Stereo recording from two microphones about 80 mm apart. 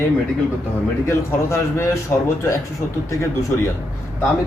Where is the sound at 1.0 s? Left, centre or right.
Left.